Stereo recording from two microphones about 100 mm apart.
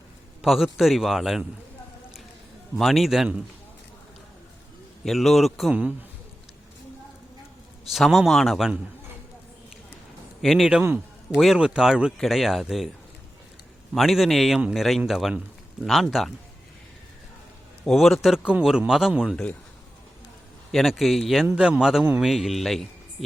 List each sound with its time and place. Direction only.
0.4 s a man's voice: centre (ahead or behind)
2.7 s a man's voice: centre (ahead or behind)
5.0 s a man's voice: centre (ahead or behind)
7.9 s a man's voice: centre (ahead or behind)
10.4 s a man's voice: centre (ahead or behind)
13.9 s a man's voice: centre (ahead or behind)
17.8 s a man's voice: centre (ahead or behind)
20.7 s a man's voice: centre (ahead or behind)